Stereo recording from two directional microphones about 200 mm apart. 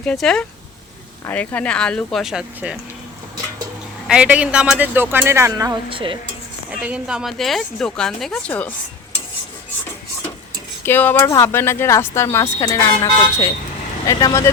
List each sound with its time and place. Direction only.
0.0 s speech: 5° left (ahead or behind)
4.0 s a man's voice: 5° right (ahead or behind); by 6.1 s 25° right (ahead or behind)
6.7 s speech: 5° right (ahead or behind)
10.8 s speech: 10° left (ahead or behind)